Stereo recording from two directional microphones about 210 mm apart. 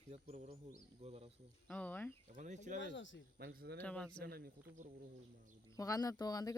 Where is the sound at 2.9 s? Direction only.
60° left (ahead or behind).